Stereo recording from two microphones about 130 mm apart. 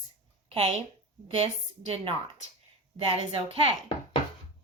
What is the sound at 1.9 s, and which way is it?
Speech, 45° right (ahead or behind).